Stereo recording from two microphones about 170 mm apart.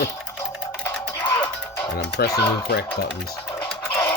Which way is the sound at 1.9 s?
70° left (ahead or behind).